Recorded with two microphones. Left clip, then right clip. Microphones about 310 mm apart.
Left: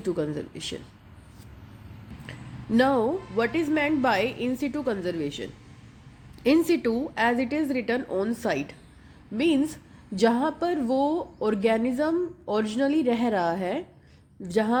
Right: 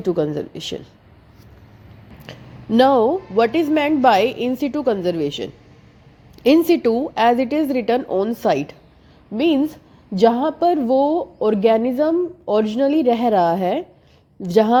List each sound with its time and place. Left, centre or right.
0.0 s a woman's voice: centre
2.2 s a woman's voice: centre